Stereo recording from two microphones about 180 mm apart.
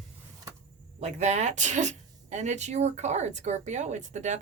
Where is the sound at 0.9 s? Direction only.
40° right (ahead or behind).